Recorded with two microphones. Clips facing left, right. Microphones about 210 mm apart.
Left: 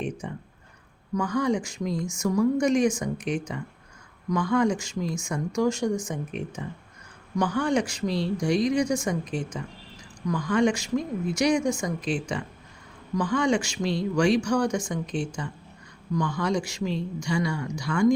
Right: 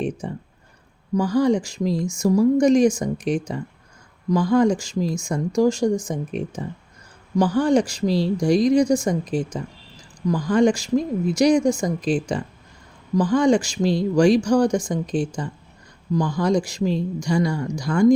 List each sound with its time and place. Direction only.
0.0 s speech: 35° right (ahead or behind)